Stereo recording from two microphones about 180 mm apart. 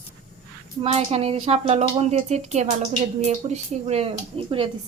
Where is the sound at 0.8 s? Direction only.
35° right (ahead or behind).